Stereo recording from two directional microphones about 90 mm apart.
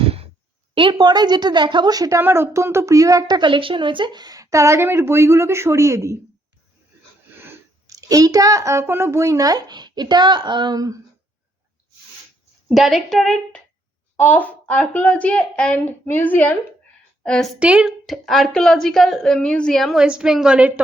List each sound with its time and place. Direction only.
0.0 s a sound: 90° right
0.7 s a woman's voice: 70° right (ahead or behind); by 2.2 s 40° right (ahead or behind)
2.2 s a woman's voice: 30° right (ahead or behind)
7.9 s a woman's voice: 40° right (ahead or behind)
12.7 s a woman's voice: centre (ahead or behind)
14.2 s a woman's voice: 20° left (ahead or behind)
17.6 s a woman's voice: 10° right (ahead or behind)
18.0 s a woman's voice: centre (ahead or behind)
20.0 s a woman's voice: 10° right (ahead or behind)